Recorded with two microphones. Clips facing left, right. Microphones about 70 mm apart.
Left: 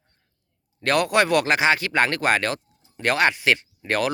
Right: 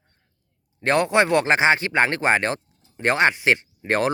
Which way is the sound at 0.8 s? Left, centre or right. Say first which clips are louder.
Right 1 dB; right.